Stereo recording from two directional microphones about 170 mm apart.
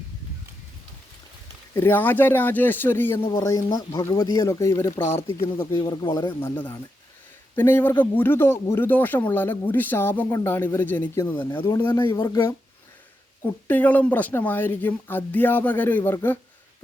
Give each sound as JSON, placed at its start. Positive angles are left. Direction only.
{"t": 1.7, "sound": "speech", "side_deg": 10}
{"t": 3.2, "sound": "speech", "side_deg": 25}
{"t": 13.4, "sound": "speech", "side_deg": 10}